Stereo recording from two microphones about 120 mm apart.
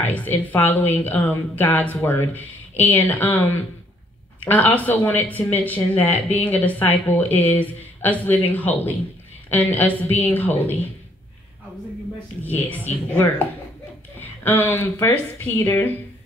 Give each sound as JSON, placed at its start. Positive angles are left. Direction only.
{"t": 0.0, "sound": "speech", "side_deg": 15}
{"t": 12.4, "sound": "speech", "side_deg": 15}